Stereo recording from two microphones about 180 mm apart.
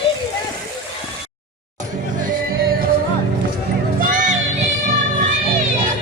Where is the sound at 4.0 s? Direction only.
45° right (ahead or behind).